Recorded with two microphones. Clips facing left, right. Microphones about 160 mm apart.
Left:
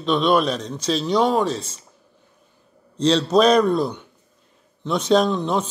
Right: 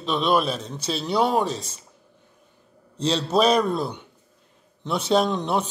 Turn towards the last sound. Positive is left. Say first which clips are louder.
# left 2 dB
turn(degrees=-15)  # may be behind; listen again after turning